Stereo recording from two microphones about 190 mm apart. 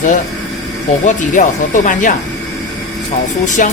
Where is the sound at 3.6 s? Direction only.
45° left (ahead or behind).